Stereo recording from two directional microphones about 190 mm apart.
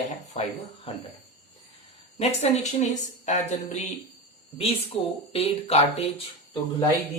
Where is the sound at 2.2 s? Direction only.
35° left (ahead or behind).